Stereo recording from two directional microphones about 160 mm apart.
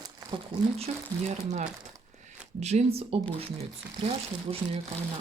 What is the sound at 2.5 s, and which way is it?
Speech, 45° right (ahead or behind).